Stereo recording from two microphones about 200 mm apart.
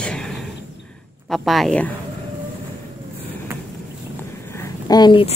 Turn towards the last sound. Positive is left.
turn(degrees=25)  # may be behind; listen again after turning